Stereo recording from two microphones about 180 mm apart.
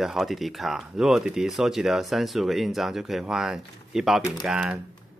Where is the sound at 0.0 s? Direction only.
Centre (ahead or behind).